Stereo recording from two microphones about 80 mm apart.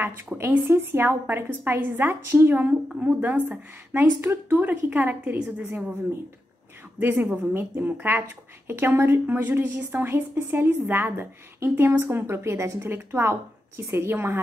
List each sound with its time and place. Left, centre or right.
0.0 s a woman's voice: right
7.0 s a woman's voice: right